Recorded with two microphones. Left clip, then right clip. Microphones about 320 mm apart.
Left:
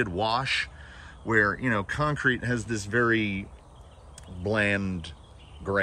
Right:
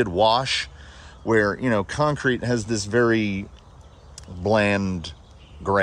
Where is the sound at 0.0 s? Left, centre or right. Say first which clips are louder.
Right 8 dB; centre.